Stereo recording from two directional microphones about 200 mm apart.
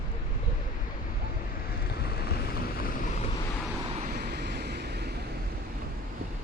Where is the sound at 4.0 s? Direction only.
50° right (ahead or behind).